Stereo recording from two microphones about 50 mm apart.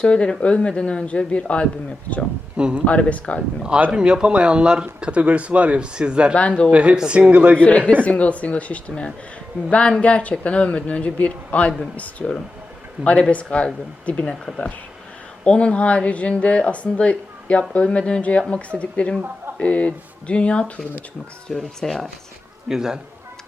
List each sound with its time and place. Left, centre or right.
0.0 s a woman's voice: left
2.6 s speech: centre
2.8 s a woman's voice: left
3.9 s speech: centre
7.6 s a woman's voice: left
15.4 s a woman's voice: left
21.5 s speech: centre
22.7 s speech: centre